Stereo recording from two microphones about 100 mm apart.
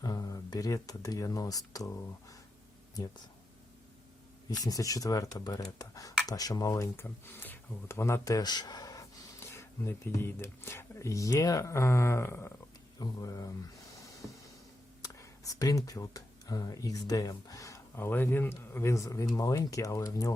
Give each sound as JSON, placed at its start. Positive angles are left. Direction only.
{"t": 0.0, "sound": "speech", "side_deg": 40}
{"t": 4.4, "sound": "speech", "side_deg": 40}
{"t": 6.9, "sound": "speech", "side_deg": 20}
{"t": 9.4, "sound": "speech", "side_deg": 25}
{"t": 13.0, "sound": "speech", "side_deg": 40}
{"t": 15.0, "sound": "speech", "side_deg": 35}